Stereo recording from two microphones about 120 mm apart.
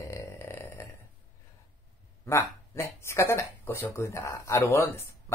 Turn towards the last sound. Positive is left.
turn(degrees=20)  # may be behind; listen again after turning